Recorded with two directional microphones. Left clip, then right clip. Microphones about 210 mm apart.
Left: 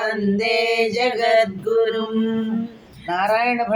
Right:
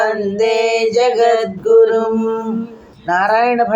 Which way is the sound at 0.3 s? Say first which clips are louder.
Right 4 dB; 20° right (ahead or behind).